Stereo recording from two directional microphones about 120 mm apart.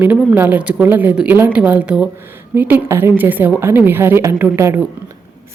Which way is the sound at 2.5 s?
20° right (ahead or behind).